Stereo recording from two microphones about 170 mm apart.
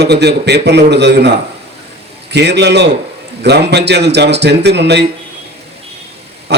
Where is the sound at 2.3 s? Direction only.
85° right.